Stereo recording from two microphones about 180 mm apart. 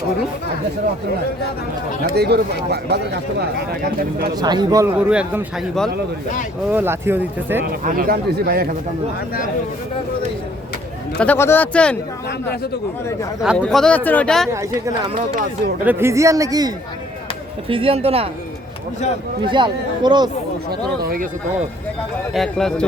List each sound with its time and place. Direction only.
2.1 s speech: 65° right (ahead or behind)
4.4 s speech: 25° right (ahead or behind)
4.9 s speech: 5° right (ahead or behind)
6.7 s speech: 10° right (ahead or behind)
7.6 s speech: 55° right (ahead or behind)
11.2 s speech: 10° left (ahead or behind)
13.6 s speech: 5° left (ahead or behind)
14.5 s speech: 15° right (ahead or behind); by 18.3 s 30° right (ahead or behind)
19.5 s speech: 25° right (ahead or behind)
20.7 s a sound: 55° right (ahead or behind)
22.3 s speech: centre (ahead or behind)